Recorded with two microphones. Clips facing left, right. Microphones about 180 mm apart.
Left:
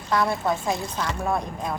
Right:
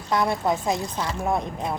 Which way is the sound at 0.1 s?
20° right (ahead or behind).